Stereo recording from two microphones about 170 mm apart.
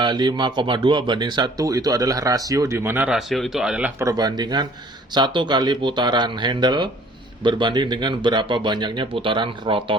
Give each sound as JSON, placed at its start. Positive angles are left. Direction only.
{"t": 0.0, "sound": "speech", "side_deg": -25}
{"t": 4.0, "sound": "speech", "side_deg": -25}